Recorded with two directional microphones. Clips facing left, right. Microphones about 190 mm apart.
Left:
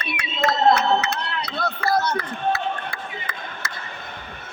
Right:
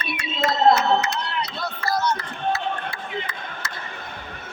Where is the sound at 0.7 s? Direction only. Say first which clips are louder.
Even; 60° left (ahead or behind).